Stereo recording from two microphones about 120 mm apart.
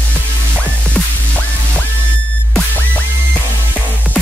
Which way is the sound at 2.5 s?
10° left (ahead or behind).